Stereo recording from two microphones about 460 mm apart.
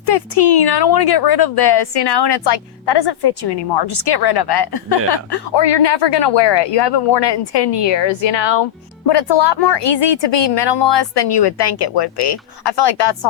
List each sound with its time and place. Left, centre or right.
0.0 s a woman's voice: left